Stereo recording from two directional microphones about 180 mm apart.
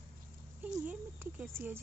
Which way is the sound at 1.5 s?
10° right (ahead or behind).